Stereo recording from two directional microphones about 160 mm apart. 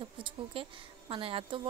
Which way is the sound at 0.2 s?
30° right (ahead or behind).